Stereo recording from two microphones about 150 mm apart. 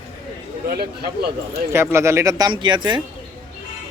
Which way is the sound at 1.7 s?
15° right (ahead or behind).